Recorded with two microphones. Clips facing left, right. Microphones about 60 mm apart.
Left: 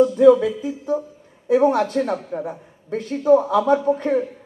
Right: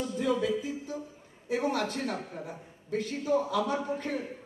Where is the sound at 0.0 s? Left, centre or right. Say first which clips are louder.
Left 16 dB; left.